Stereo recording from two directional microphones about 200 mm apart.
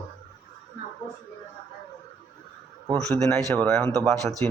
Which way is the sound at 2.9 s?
15° right (ahead or behind).